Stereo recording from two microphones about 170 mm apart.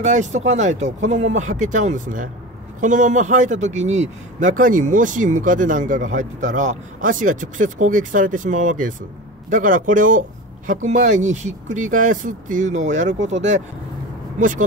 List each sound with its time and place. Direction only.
0.0 s a man's voice: 45° right (ahead or behind)